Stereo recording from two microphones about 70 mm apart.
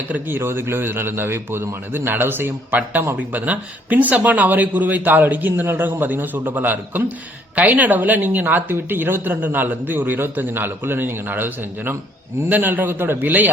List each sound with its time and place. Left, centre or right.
0.1 s a man's voice: right